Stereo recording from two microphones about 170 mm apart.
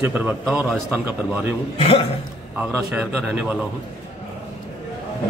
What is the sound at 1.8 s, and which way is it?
Speech, 35° left (ahead or behind).